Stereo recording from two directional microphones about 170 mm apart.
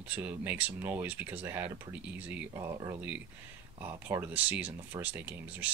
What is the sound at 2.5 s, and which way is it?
Speech, 25° right (ahead or behind).